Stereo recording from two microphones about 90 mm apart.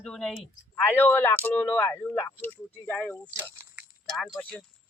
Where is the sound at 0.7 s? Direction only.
20° left (ahead or behind).